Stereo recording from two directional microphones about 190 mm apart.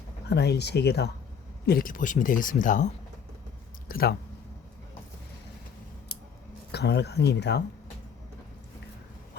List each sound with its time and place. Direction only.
0.3 s speech: 60° left (ahead or behind)
6.7 s speech: 60° left (ahead or behind)